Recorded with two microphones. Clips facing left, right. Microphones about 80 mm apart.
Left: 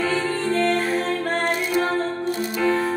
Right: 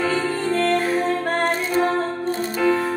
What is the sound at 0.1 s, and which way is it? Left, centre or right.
Music, centre.